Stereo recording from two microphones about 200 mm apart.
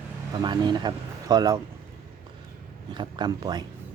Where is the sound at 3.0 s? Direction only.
20° right (ahead or behind).